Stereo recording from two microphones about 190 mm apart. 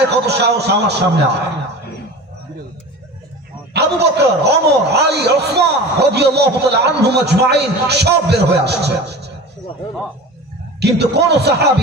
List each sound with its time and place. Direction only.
0.1 s a man's voice: 60° right (ahead or behind)
3.7 s a man's voice: 60° right (ahead or behind)
10.8 s a man's voice: 60° right (ahead or behind)